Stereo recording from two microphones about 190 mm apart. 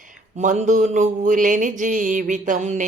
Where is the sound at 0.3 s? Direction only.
40° right (ahead or behind).